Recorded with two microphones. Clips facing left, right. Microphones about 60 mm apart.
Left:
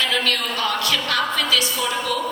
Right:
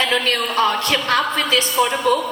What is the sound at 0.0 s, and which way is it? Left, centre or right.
A woman's voice, right.